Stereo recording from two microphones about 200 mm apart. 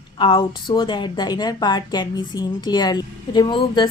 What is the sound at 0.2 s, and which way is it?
A woman's voice, 25° left (ahead or behind).